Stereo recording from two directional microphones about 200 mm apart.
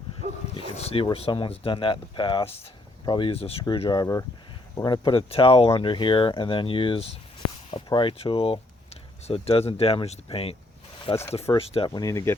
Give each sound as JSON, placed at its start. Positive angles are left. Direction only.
{"t": 0.5, "sound": "speech", "side_deg": 30}
{"t": 11.1, "sound": "speech", "side_deg": 15}
{"t": 11.5, "sound": "speech", "side_deg": 25}
{"t": 12.0, "sound": "speech", "side_deg": 15}